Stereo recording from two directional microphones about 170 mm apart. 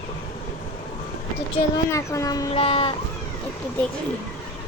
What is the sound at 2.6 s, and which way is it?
Speech, 35° left (ahead or behind).